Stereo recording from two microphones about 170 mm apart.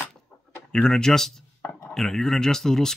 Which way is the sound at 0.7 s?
5° left (ahead or behind).